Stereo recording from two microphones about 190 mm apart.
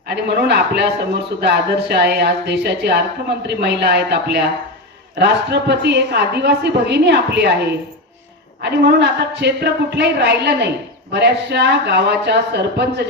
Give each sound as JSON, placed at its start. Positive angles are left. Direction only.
{"t": 0.1, "sound": "a woman's voice", "side_deg": -60}
{"t": 8.6, "sound": "a woman's voice", "side_deg": -60}